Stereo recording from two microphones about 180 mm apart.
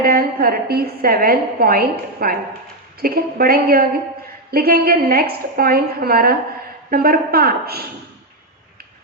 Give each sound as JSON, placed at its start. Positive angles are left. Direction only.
{"t": 0.0, "sound": "a woman's voice", "side_deg": -55}